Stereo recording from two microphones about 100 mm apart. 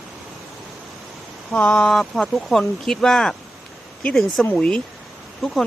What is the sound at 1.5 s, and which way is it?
Speech, 10° left (ahead or behind).